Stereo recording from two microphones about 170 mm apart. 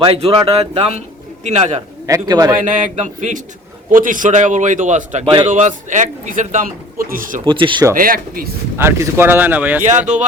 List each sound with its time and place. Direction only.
0.0 s speech: 35° right (ahead or behind)
2.0 s speech: 20° right (ahead or behind)
2.6 s a man's voice: 50° right (ahead or behind)
5.2 s speech: 30° right (ahead or behind)
5.5 s a man's voice: 45° right (ahead or behind)
7.4 s speech: 30° right (ahead or behind)
7.9 s speech: 55° right (ahead or behind)
8.8 s speech: 15° right (ahead or behind)